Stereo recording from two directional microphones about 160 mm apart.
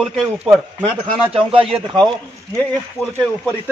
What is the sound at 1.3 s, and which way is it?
Speech, 35° right (ahead or behind).